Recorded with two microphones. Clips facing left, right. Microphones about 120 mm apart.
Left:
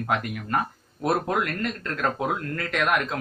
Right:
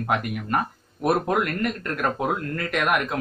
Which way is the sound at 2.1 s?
5° right (ahead or behind).